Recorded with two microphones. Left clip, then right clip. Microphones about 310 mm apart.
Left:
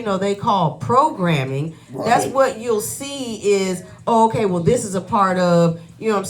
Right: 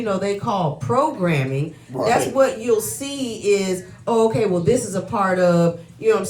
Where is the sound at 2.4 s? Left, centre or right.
Centre.